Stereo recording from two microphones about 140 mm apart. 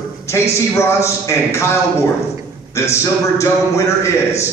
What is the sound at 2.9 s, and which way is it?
A man's voice, 20° left (ahead or behind).